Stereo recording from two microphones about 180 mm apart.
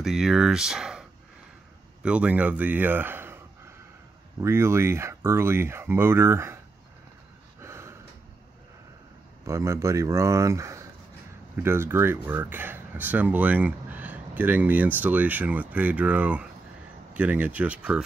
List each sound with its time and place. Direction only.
0.0 s speech: centre (ahead or behind)
2.0 s speech: 5° right (ahead or behind)
4.4 s speech: 15° right (ahead or behind)
7.6 s a sound: 15° right (ahead or behind)
9.4 s speech: 15° right (ahead or behind)